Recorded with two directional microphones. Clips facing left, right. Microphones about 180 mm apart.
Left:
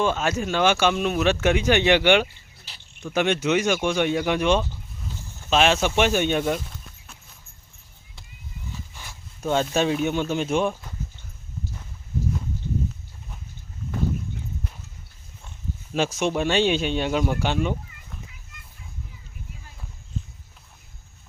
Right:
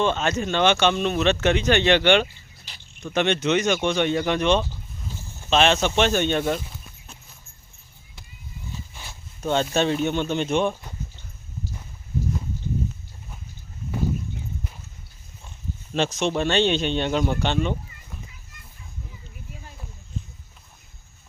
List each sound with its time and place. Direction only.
0.0 s speech: 5° left (ahead or behind)
6.4 s speech: centre (ahead or behind)
8.7 s a sound: 15° right (ahead or behind)
9.4 s speech: 5° left (ahead or behind)
15.9 s speech: 10° left (ahead or behind)